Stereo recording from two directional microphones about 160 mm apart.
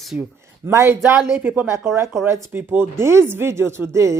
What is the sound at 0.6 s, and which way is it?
Speech, 15° right (ahead or behind).